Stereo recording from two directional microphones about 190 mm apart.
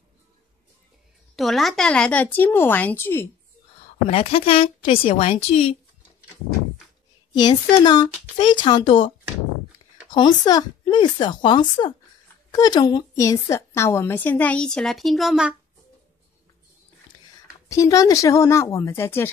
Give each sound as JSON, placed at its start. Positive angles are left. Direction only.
{"t": 1.3, "sound": "a woman's voice", "side_deg": 0}
{"t": 4.1, "sound": "speech", "side_deg": 30}
{"t": 7.3, "sound": "speech", "side_deg": 25}
{"t": 10.1, "sound": "a woman's voice", "side_deg": 20}
{"t": 17.6, "sound": "a woman's voice", "side_deg": 15}